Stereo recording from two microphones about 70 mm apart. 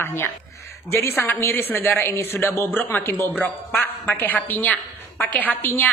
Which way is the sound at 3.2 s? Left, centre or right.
Left.